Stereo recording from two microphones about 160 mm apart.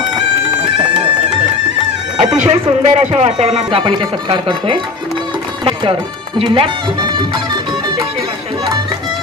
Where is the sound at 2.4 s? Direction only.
45° right (ahead or behind).